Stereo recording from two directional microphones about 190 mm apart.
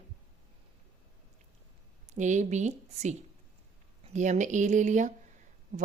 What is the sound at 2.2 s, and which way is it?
A woman's voice, 40° right (ahead or behind).